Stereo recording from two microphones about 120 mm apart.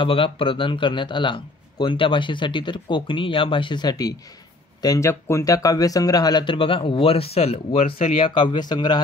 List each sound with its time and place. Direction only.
0.0 s speech: 45° left (ahead or behind)